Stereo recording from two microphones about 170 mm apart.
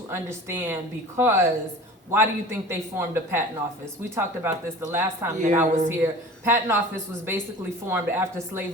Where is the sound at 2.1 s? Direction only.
15° right (ahead or behind).